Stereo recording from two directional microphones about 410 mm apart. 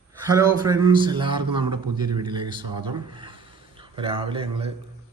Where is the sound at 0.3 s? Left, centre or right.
Centre.